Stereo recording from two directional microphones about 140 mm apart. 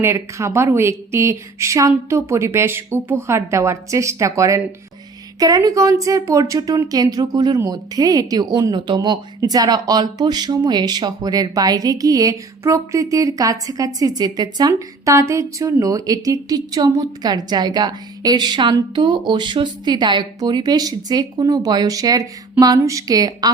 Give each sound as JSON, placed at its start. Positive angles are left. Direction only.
{"t": 0.0, "sound": "speech", "side_deg": -20}